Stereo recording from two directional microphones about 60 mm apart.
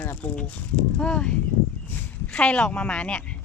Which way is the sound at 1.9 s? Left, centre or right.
Left.